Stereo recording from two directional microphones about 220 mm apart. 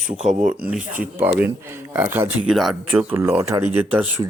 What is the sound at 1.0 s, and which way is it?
Speech, 10° right (ahead or behind).